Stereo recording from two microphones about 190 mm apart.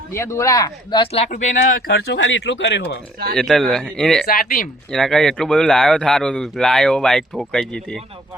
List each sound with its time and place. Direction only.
0.1 s speech: 15° left (ahead or behind); by 1.5 s 40° left (ahead or behind)
1.9 s speech: 60° left (ahead or behind)
3.3 s a man's voice: centre (ahead or behind)
4.3 s speech: 50° left (ahead or behind)
4.9 s a man's voice: centre (ahead or behind)